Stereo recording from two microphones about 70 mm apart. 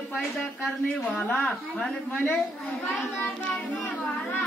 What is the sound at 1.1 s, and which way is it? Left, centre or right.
A child's voice, left.